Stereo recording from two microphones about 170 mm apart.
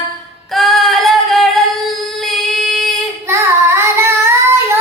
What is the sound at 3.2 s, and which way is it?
Child singing, 15° right (ahead or behind).